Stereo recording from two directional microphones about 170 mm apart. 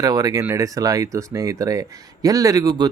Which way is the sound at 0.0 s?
20° right (ahead or behind).